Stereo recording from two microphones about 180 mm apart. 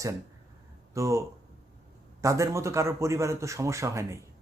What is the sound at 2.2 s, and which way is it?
Speech, 15° right (ahead or behind).